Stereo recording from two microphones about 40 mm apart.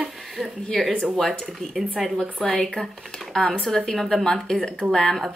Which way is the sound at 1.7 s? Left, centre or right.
Centre.